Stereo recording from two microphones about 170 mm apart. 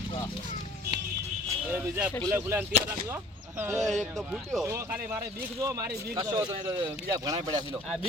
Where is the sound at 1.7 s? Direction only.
10° right (ahead or behind).